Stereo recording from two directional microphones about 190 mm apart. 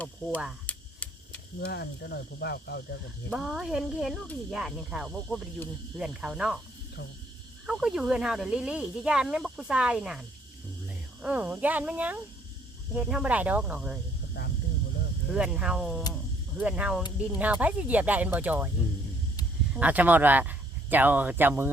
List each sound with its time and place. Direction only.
0.7 s a sound: 5° left (ahead or behind)
1.6 s speech: 60° left (ahead or behind)
3.2 s speech: centre (ahead or behind)
7.7 s speech: 5° right (ahead or behind)
15.3 s speech: 5° right (ahead or behind)
19.7 s speech: 5° right (ahead or behind)